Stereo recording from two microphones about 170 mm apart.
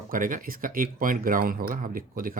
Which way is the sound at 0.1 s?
50° right (ahead or behind).